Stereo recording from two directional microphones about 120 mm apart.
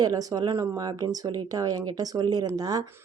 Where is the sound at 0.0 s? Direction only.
30° right (ahead or behind).